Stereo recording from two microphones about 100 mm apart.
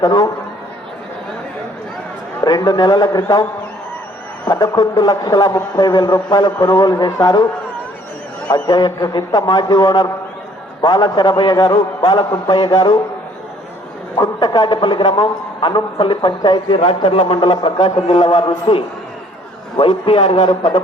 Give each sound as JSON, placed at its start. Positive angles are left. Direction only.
{"t": 0.0, "sound": "a man's voice", "side_deg": 45}
{"t": 2.4, "sound": "a man's voice", "side_deg": 40}
{"t": 4.4, "sound": "a man's voice", "side_deg": 40}
{"t": 8.4, "sound": "a man's voice", "side_deg": 40}
{"t": 14.2, "sound": "a man's voice", "side_deg": 45}